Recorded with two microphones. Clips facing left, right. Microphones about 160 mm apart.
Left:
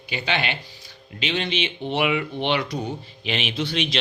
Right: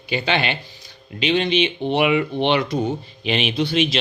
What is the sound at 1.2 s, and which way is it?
Speech, 15° right (ahead or behind).